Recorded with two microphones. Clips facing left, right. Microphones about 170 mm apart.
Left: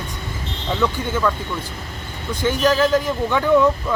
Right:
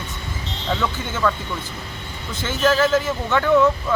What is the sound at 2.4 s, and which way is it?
Speech, 10° left (ahead or behind).